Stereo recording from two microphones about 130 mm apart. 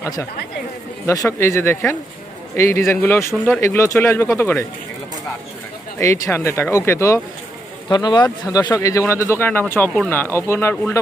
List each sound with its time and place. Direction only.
1.0 s speech: 25° left (ahead or behind)
6.3 s speech: 20° left (ahead or behind)
7.9 s speech: 35° left (ahead or behind)